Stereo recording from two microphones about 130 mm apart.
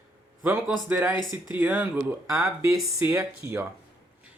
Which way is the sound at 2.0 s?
20° right (ahead or behind).